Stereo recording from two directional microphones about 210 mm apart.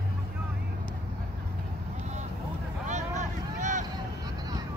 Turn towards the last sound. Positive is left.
turn(degrees=-35)  # may be behind; listen again after turning